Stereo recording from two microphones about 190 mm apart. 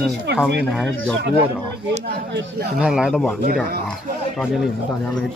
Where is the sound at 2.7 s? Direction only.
5° right (ahead or behind).